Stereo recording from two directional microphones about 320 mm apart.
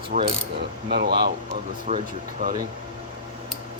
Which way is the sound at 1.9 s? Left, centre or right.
Right.